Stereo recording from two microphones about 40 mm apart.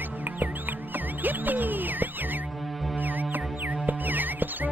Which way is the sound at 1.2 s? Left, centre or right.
Right.